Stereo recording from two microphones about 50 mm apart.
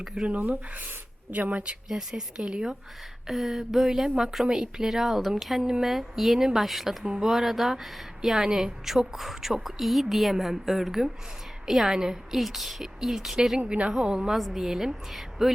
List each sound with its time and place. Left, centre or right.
0.3 s speech: right
1.9 s a woman's voice: centre
13.7 s a woman's voice: right
14.3 s a woman's voice: centre